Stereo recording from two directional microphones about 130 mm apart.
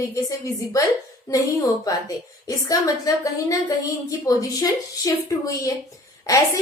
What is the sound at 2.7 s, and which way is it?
A woman's voice, 25° left (ahead or behind).